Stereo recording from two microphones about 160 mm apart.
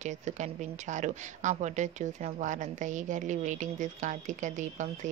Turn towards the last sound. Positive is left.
turn(degrees=-50)  # may be behind; listen again after turning